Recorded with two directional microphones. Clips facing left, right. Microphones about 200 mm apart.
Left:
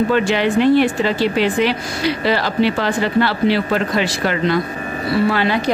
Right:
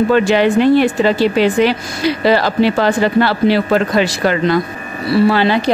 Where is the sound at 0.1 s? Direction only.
40° right (ahead or behind).